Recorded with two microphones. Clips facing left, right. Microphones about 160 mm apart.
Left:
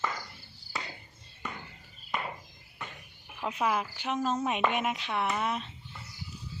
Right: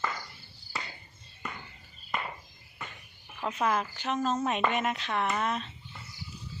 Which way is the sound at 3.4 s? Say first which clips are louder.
Right 1 dB; 10° left (ahead or behind).